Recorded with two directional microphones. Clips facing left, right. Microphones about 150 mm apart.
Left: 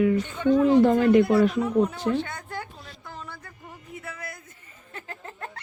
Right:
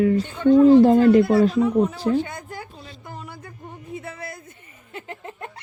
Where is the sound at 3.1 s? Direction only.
15° right (ahead or behind).